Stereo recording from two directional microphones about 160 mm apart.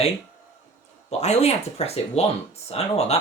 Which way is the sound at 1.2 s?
45° left (ahead or behind).